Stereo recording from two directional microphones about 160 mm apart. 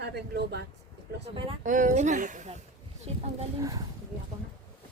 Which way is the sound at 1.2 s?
35° right (ahead or behind).